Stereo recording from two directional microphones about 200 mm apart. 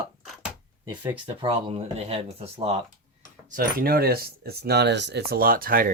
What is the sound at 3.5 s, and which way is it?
Speech, 45° right (ahead or behind).